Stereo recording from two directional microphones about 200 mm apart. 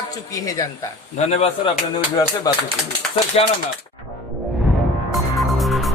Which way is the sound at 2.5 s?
20° left (ahead or behind).